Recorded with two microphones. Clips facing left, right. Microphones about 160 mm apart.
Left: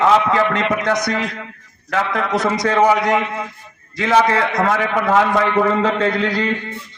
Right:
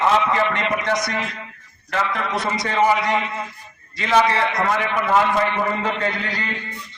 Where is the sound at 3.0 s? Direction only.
70° left (ahead or behind).